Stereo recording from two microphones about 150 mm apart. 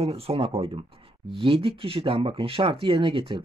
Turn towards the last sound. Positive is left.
turn(degrees=-35)  # may be behind; listen again after turning